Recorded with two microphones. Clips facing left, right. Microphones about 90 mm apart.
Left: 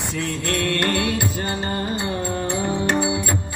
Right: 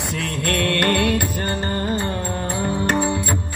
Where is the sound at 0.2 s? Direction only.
60° right (ahead or behind); by 3.1 s 40° right (ahead or behind).